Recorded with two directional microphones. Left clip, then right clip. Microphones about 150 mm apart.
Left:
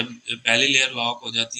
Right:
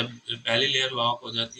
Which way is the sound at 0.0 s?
50° left (ahead or behind).